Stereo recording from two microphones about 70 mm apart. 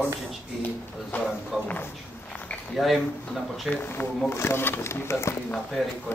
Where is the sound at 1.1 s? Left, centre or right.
Left.